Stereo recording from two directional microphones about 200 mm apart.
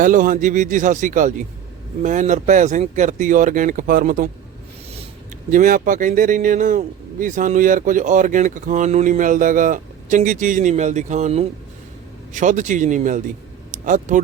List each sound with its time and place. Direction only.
0.0 s a man's voice: 40° right (ahead or behind)
5.5 s a man's voice: 40° right (ahead or behind)
13.7 s a sound: 40° right (ahead or behind)